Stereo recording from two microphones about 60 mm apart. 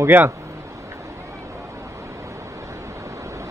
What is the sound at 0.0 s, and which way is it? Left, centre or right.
Speech, right.